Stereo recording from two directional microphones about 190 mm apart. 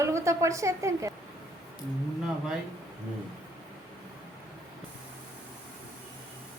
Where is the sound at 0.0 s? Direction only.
15° right (ahead or behind).